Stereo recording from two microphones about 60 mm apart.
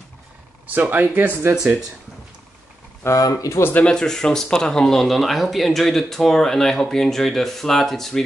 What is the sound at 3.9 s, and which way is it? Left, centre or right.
Speech, centre.